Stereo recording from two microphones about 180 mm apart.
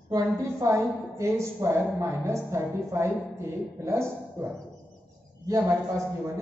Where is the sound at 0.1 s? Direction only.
15° right (ahead or behind).